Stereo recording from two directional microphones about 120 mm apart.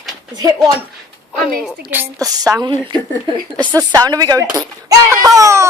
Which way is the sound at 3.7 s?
30° right (ahead or behind).